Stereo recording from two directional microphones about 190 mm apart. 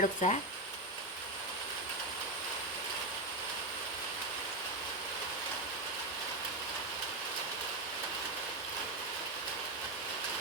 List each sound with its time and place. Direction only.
0.0 s speech: 40° left (ahead or behind)